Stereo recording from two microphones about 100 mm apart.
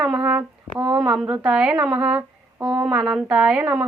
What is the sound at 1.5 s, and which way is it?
Speech, 10° right (ahead or behind).